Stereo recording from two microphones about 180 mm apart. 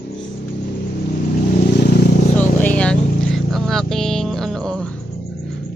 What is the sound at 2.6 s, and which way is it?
Vehicle, 5° left (ahead or behind).